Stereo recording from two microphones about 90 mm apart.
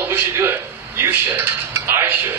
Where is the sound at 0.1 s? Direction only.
25° right (ahead or behind).